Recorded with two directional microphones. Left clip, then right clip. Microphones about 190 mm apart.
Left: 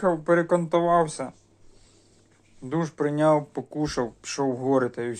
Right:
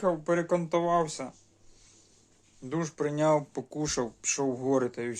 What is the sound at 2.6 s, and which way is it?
Speech, 15° right (ahead or behind).